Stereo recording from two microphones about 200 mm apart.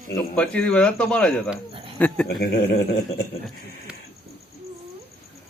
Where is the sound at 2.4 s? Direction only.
50° left (ahead or behind).